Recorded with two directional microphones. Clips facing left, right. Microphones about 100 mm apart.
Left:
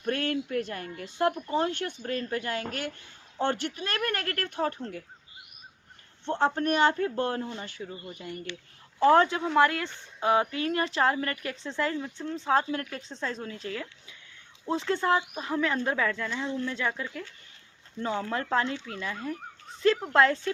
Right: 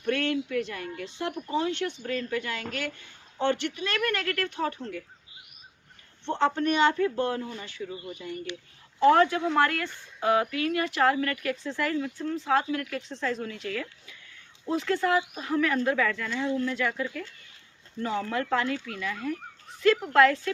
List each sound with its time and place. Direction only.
0.1 s speech: 45° left (ahead or behind)
6.4 s speech: 45° left (ahead or behind)
9.0 s speech: 25° left (ahead or behind)